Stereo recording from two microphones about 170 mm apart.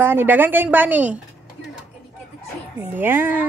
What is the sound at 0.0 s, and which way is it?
A woman's voice, 15° right (ahead or behind).